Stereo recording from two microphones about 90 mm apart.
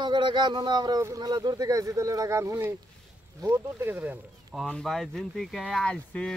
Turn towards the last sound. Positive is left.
turn(degrees=10)  # may be behind; listen again after turning